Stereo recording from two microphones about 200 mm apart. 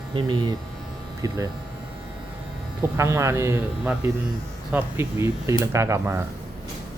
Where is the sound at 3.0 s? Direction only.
15° right (ahead or behind).